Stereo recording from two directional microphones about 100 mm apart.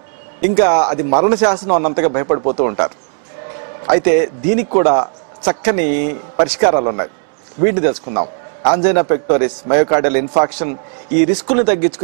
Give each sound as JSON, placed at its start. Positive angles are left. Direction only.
{"t": 0.6, "sound": "a man's voice", "side_deg": -15}